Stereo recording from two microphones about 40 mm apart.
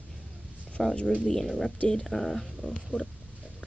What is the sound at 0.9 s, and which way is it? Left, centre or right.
Speech, left.